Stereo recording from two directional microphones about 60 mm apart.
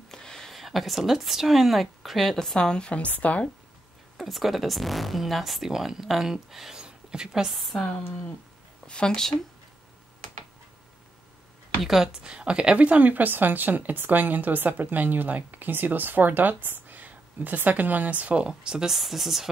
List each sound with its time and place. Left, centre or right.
0.1 s speech: centre; by 3.4 s left
4.2 s speech: centre
7.5 s speech: centre
8.8 s speech: centre
11.8 s a woman's voice: centre